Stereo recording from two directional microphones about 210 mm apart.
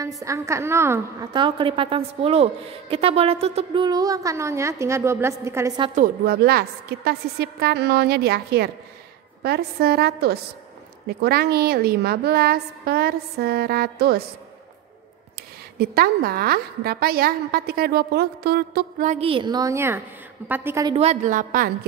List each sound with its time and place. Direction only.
0.0 s a woman's voice: 15° right (ahead or behind)
5.9 s a woman's voice: 45° right (ahead or behind)
15.8 s a woman's voice: 45° right (ahead or behind)
19.0 s a woman's voice: 30° right (ahead or behind); by 20.9 s 10° right (ahead or behind)
20.9 s a woman's voice: 30° right (ahead or behind)